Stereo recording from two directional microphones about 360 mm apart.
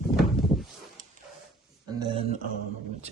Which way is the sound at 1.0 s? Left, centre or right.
Right.